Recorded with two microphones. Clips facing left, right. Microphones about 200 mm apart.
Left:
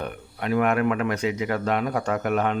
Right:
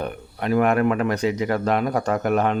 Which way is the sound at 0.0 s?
40° right (ahead or behind).